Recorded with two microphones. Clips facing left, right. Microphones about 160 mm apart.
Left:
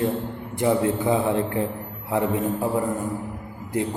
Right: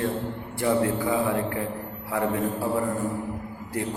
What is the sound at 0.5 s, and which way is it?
A man's voice, 20° left (ahead or behind).